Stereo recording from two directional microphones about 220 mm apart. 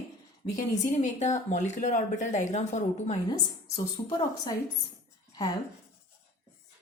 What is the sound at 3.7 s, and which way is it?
Speech, 20° left (ahead or behind).